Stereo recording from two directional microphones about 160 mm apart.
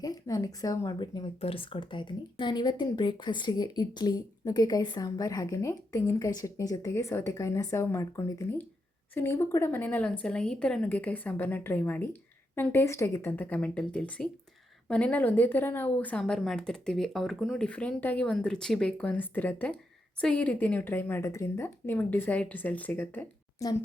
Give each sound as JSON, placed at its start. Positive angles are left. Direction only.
{"t": 0.0, "sound": "speech", "side_deg": 20}
{"t": 1.4, "sound": "a woman's voice", "side_deg": 35}